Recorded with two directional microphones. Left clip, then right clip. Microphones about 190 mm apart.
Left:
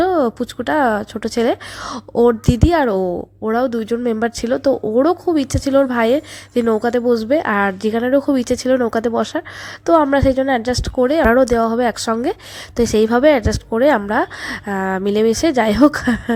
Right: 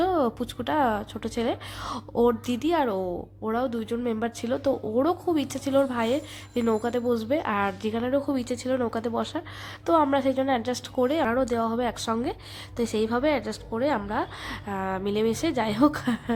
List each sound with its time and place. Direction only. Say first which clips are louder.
0.0 s speech: left 8 dB; 25° left (ahead or behind)